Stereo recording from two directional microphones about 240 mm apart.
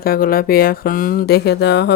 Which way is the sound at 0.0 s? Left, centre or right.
Left.